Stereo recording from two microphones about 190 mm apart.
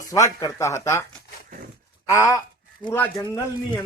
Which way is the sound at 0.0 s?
15° left (ahead or behind).